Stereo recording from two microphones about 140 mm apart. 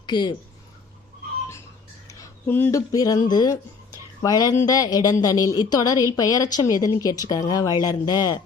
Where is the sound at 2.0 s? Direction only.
15° left (ahead or behind).